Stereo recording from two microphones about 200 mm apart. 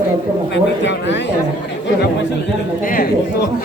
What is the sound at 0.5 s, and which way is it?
Speech, 60° left (ahead or behind).